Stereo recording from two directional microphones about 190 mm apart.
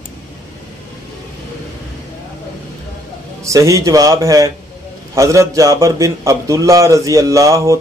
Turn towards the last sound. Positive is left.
turn(degrees=-15)  # may be behind; listen again after turning